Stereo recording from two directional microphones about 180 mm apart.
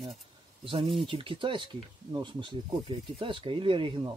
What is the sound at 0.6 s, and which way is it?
Speech, 30° right (ahead or behind).